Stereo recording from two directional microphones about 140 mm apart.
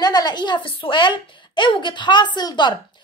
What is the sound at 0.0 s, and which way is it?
A woman's voice, 30° left (ahead or behind).